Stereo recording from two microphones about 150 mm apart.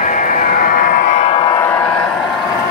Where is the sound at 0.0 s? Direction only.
60° left (ahead or behind).